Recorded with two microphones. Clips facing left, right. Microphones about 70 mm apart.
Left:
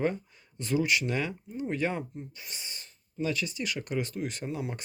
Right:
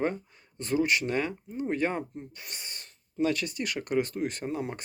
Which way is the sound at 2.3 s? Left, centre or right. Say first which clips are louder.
Right 1 dB; right.